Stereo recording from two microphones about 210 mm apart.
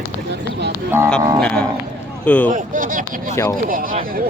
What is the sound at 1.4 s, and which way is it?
Speech, 5° left (ahead or behind).